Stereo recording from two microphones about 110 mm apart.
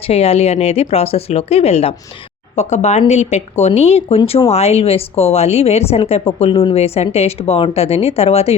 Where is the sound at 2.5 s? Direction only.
90° left; by 6.8 s 55° left (ahead or behind).